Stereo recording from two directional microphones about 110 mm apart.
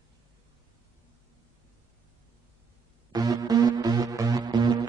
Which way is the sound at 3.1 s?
35° right (ahead or behind).